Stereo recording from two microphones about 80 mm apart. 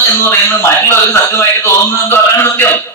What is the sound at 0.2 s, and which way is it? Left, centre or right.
A man's voice, left.